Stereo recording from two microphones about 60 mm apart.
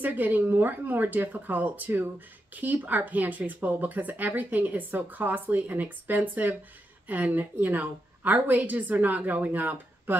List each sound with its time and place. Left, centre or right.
0.0 s speech: right